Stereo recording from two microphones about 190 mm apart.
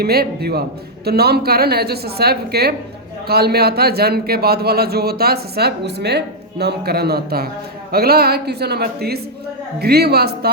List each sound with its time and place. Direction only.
0.0 s speech: 55° right (ahead or behind)